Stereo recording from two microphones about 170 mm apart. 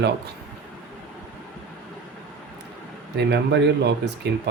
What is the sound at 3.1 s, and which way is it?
Speech, 80° right.